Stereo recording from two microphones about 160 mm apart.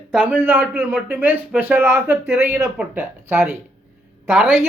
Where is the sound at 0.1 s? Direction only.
10° right (ahead or behind).